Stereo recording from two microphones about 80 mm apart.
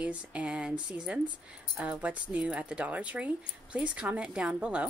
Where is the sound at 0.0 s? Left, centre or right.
Centre.